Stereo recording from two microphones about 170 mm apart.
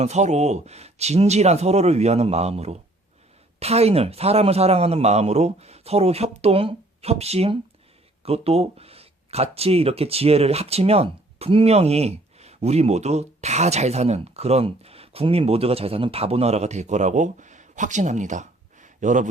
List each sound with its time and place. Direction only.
0.0 s a man's voice: 40° right (ahead or behind)